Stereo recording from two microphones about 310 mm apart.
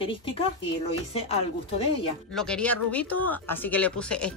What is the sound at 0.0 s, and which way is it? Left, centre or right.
Speech, centre.